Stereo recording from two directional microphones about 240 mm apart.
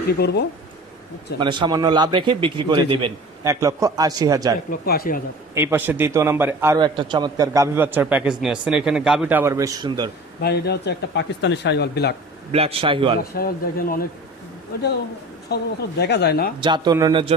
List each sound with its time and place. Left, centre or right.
0.0 s speech: left
1.4 s a man's voice: centre
4.6 s speech: left
5.5 s a man's voice: centre
10.4 s speech: left
12.4 s a man's voice: right
13.2 s speech: left
15.5 s speech: left
16.6 s a man's voice: centre